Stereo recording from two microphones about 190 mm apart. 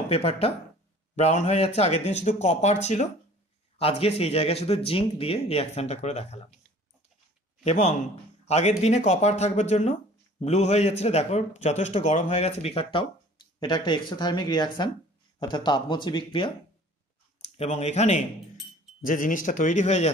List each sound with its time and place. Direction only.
0.1 s a man's voice: 30° left (ahead or behind)
7.6 s a man's voice: 35° left (ahead or behind)